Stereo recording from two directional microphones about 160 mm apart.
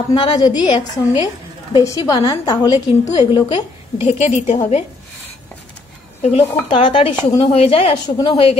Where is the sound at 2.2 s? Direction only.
25° left (ahead or behind).